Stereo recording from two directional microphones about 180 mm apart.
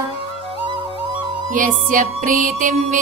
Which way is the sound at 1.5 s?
45° right (ahead or behind).